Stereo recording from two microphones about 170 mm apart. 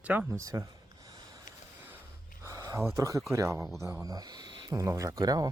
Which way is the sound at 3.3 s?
15° right (ahead or behind).